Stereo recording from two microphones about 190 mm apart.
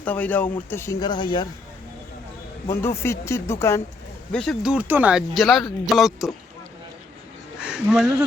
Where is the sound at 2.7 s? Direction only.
15° left (ahead or behind).